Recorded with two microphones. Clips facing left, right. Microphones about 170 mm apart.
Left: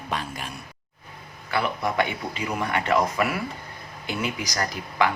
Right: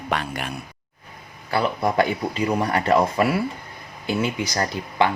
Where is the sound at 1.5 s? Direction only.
35° right (ahead or behind).